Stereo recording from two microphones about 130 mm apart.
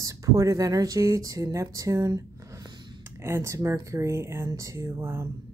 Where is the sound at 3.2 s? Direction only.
20° right (ahead or behind).